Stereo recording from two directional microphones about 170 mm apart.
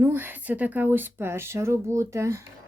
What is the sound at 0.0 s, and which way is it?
Speech, 10° right (ahead or behind).